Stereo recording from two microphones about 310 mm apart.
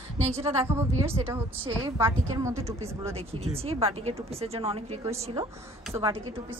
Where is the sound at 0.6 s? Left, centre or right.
Centre.